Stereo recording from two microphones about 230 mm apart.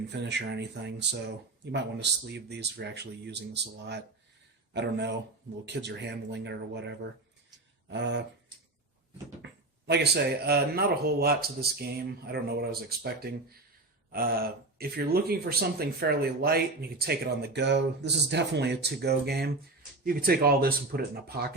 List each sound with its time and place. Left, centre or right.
0.1 s speech: right
9.4 s speech: right